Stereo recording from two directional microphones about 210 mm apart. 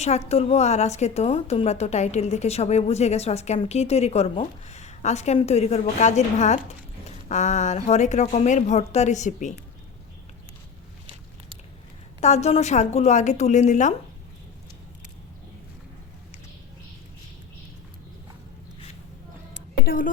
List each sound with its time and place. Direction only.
0.0 s a woman's voice: 30° left (ahead or behind)
12.2 s a woman's voice: 30° left (ahead or behind)
19.8 s a woman's voice: 45° left (ahead or behind)